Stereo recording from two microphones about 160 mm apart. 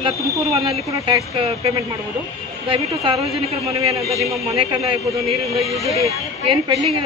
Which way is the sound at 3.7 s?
20° right (ahead or behind).